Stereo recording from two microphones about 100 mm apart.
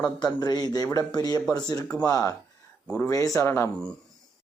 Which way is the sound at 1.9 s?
10° left (ahead or behind).